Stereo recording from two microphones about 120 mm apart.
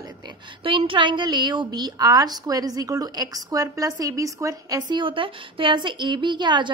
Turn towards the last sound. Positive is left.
turn(degrees=-40)  # may be behind; listen again after turning